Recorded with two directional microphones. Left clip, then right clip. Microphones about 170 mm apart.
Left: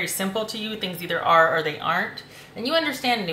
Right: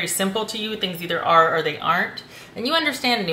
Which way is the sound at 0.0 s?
20° right (ahead or behind).